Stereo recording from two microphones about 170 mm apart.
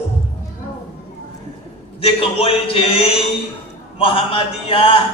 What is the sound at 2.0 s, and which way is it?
Speech, 35° left (ahead or behind).